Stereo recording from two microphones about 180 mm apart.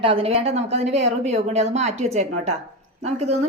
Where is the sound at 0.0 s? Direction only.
30° right (ahead or behind).